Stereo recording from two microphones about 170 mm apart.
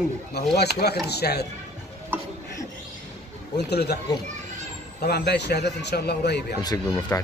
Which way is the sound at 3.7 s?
70° left (ahead or behind).